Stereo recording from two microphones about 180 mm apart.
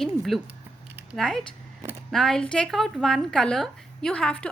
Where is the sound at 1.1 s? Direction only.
Centre (ahead or behind).